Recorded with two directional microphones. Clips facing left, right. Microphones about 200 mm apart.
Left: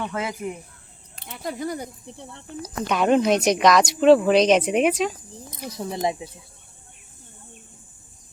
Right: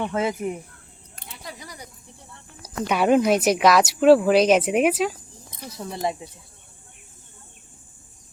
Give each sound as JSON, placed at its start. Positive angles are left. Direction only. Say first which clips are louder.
{"t": 0.0, "sound": "speech", "louder": "right 4 dB", "side_deg": -25}
{"t": 1.3, "sound": "speech", "louder": "left 12 dB", "side_deg": 50}
{"t": 2.6, "sound": "speech", "louder": "even", "side_deg": -10}
{"t": 5.5, "sound": "speech", "louder": "left 3 dB", "side_deg": 15}